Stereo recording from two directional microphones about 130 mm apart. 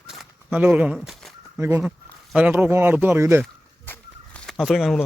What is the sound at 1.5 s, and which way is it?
Speech, 15° right (ahead or behind).